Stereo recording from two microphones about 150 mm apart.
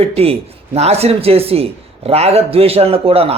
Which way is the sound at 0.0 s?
40° right (ahead or behind).